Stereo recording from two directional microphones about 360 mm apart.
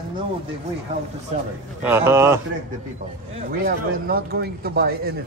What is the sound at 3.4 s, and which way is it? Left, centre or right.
A man's voice, right.